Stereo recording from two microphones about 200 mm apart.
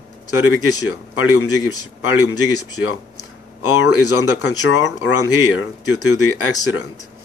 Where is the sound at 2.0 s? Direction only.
90° left.